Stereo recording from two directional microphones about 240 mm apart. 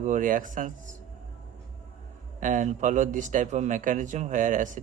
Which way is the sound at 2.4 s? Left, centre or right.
Right.